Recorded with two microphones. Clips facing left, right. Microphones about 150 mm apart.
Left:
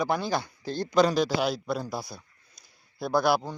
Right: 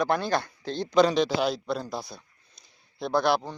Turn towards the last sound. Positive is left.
turn(degrees=5)  # may be behind; listen again after turning